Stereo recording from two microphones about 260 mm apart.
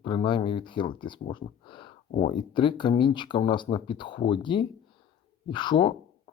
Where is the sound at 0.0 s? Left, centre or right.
Centre.